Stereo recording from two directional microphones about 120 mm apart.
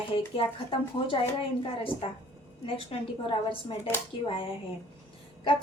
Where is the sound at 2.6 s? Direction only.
50° left (ahead or behind).